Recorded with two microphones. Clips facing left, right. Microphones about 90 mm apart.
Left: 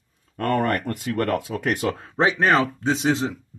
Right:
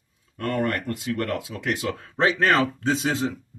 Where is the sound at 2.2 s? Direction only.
15° left (ahead or behind).